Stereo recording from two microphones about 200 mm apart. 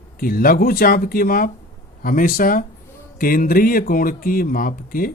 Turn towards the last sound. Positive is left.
turn(degrees=45)  # may be behind; listen again after turning